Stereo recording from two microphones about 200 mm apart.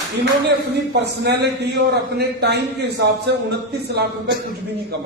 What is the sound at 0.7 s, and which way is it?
A man's voice, 55° right (ahead or behind).